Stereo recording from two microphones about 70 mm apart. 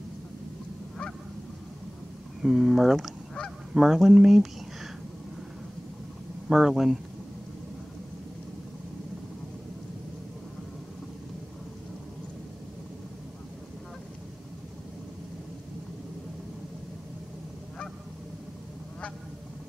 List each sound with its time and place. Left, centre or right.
2.4 s goose: centre
6.5 s goose: centre